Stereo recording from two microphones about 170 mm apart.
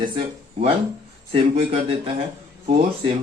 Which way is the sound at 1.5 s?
35° right (ahead or behind).